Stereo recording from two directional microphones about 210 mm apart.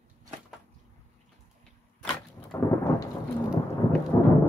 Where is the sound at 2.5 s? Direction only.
10° left (ahead or behind).